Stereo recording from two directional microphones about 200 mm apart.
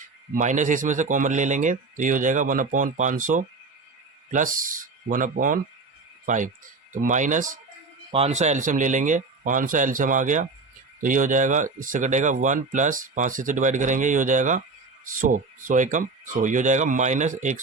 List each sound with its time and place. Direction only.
0.3 s speech: 40° right (ahead or behind)